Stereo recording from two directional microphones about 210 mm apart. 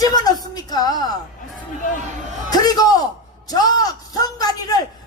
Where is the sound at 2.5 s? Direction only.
20° left (ahead or behind).